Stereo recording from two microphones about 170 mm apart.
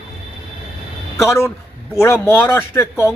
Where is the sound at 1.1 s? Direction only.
15° left (ahead or behind).